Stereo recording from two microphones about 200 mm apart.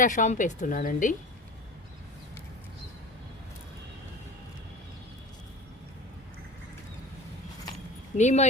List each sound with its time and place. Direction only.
0.0 s speech: 40° left (ahead or behind)
8.2 s speech: 35° left (ahead or behind)